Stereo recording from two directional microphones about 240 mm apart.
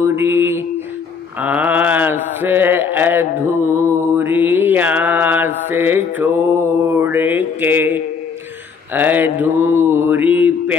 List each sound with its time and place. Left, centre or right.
0.0 s mantra: centre